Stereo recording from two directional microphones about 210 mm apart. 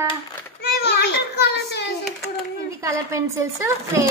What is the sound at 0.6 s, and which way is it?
A child's voice, 50° left (ahead or behind).